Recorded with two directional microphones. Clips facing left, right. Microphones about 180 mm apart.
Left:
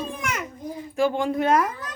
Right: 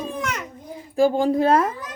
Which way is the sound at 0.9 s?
35° right (ahead or behind).